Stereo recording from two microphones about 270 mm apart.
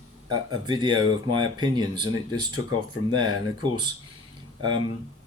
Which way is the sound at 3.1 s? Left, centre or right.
Centre.